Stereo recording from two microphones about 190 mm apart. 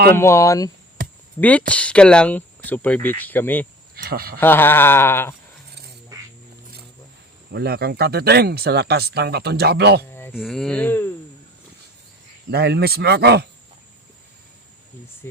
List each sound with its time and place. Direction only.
0.2 s speech: 15° left (ahead or behind)
3.9 s speech: 55° right (ahead or behind)
4.4 s speech: 10° left (ahead or behind)
7.5 s speech: 55° right (ahead or behind)
10.3 s speech: centre (ahead or behind)
12.5 s speech: 60° right (ahead or behind)